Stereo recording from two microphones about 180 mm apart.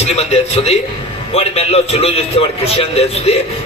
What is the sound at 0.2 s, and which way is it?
A man's voice, 35° left (ahead or behind).